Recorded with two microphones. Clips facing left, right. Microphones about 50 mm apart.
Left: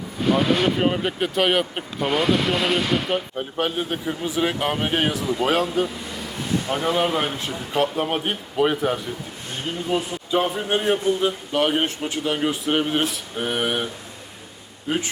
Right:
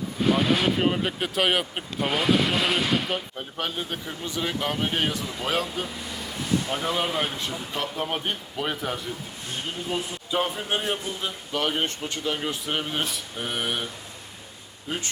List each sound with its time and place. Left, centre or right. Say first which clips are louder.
0.2 s speech: left 3 dB; centre
5.5 s speech: left 6 dB; centre
7.7 s speech: left 9 dB; centre
10.3 s speech: left 5 dB; centre
11.0 s speech: left 11 dB; centre
13.3 s a sound: left 5 dB; centre